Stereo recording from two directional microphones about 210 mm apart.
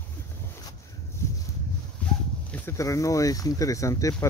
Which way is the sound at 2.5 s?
15° left (ahead or behind).